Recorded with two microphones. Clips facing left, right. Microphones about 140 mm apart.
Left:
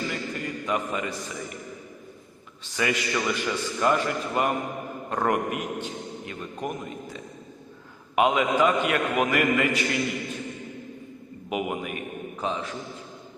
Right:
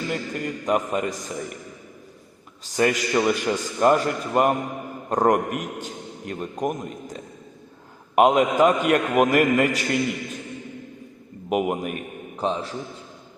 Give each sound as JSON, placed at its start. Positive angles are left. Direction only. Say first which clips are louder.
{"t": 0.1, "sound": "a man's voice", "louder": "right 4 dB", "side_deg": -45}
{"t": 2.6, "sound": "a man's voice", "louder": "right 5 dB", "side_deg": -40}
{"t": 11.4, "sound": "a man's voice", "louder": "right 6 dB", "side_deg": -45}